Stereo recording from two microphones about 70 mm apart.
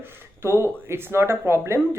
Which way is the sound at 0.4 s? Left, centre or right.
Right.